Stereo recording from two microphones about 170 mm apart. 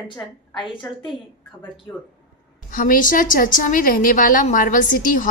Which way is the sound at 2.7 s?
50° left (ahead or behind).